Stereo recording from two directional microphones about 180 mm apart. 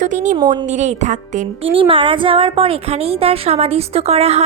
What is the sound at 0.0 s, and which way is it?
A woman's voice, 45° right (ahead or behind).